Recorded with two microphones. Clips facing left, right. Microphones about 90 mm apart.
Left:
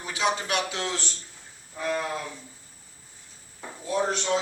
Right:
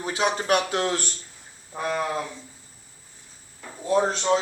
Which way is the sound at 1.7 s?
60° right (ahead or behind).